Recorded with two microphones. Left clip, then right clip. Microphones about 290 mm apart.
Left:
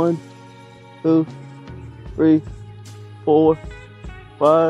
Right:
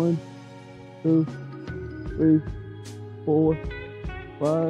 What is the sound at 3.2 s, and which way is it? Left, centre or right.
Speech, left.